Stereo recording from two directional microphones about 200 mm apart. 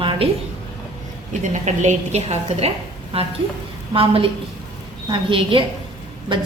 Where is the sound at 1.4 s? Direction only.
35° right (ahead or behind).